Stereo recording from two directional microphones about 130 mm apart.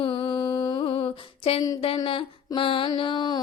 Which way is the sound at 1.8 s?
45° left (ahead or behind).